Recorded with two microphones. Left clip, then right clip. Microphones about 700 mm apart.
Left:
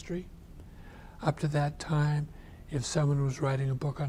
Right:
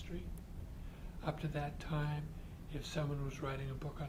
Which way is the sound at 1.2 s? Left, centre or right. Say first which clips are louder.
Left 10 dB; left.